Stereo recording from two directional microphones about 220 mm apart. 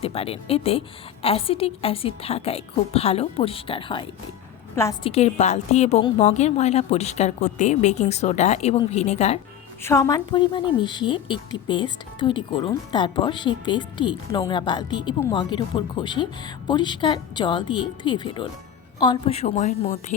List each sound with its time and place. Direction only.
0.0 s a woman's voice: 25° left (ahead or behind)
4.7 s a woman's voice: 10° left (ahead or behind)
5.0 s a woman's voice: 30° left (ahead or behind)
9.8 s a woman's voice: 15° left (ahead or behind); by 20.1 s 30° left (ahead or behind)